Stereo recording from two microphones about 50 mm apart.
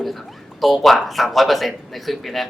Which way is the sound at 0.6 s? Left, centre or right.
Centre.